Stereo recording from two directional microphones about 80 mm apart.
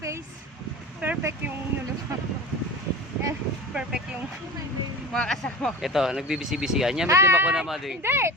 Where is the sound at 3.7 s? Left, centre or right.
Centre.